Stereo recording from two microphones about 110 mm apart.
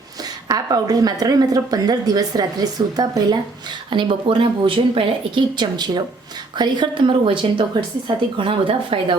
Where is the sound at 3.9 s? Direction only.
50° right (ahead or behind).